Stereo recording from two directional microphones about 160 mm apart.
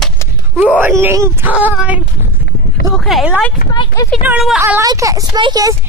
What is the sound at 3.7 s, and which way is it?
Speech, 25° left (ahead or behind).